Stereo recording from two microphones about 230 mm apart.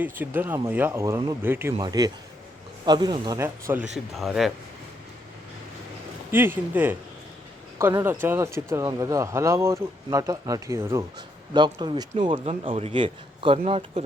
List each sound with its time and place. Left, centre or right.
0.0 s speech: centre
3.9 s speech: centre
6.3 s speech: centre; by 14.0 s right